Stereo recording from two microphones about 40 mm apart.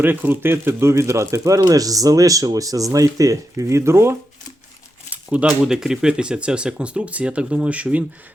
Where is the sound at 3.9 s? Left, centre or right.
Right.